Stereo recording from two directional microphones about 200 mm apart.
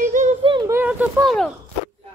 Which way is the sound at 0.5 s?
15° right (ahead or behind).